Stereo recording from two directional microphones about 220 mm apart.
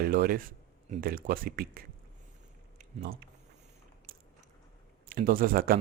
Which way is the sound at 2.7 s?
45° right (ahead or behind).